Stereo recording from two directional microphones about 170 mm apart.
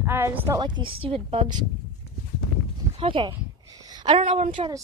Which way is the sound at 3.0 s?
30° right (ahead or behind).